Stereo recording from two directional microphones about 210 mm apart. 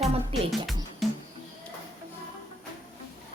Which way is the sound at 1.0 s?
Centre (ahead or behind).